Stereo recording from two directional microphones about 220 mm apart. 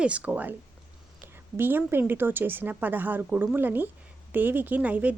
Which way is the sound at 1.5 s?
10° right (ahead or behind).